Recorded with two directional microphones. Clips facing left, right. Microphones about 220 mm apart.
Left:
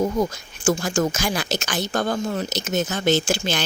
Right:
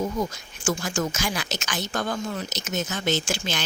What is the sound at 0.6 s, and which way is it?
A woman's voice, 30° left (ahead or behind).